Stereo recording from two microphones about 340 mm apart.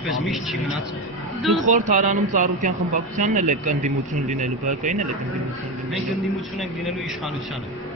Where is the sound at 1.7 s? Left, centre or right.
Right.